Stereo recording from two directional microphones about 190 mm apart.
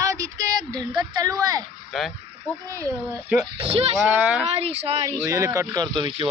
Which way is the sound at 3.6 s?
30° right (ahead or behind).